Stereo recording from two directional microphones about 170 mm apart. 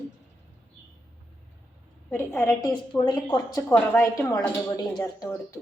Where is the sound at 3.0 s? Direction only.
25° left (ahead or behind).